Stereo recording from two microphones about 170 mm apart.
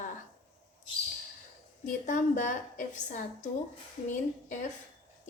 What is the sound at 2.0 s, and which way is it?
A woman's voice, 50° left (ahead or behind).